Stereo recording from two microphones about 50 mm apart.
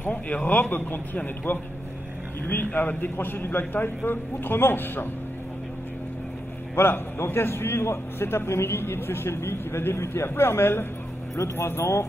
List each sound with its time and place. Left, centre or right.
0.0 s a man's voice: left
6.7 s a man's voice: left
11.3 s speech: left